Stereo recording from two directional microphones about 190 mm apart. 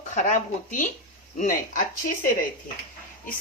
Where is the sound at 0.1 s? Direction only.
40° left (ahead or behind).